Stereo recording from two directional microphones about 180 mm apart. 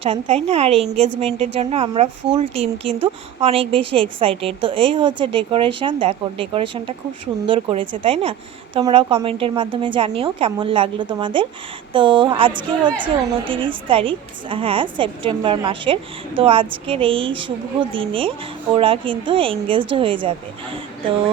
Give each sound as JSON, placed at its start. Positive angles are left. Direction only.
{"t": 0.0, "sound": "a woman's voice", "side_deg": -30}